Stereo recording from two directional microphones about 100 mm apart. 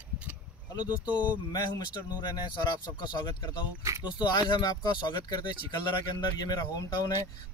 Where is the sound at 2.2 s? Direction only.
45° left (ahead or behind).